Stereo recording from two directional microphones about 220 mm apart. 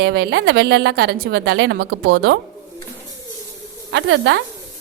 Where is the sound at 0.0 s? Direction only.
50° right (ahead or behind).